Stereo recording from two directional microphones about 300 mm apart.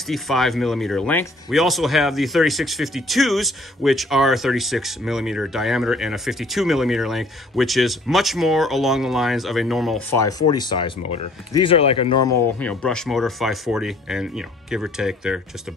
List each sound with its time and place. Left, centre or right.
0.0 s speech: centre
12.5 s speech: centre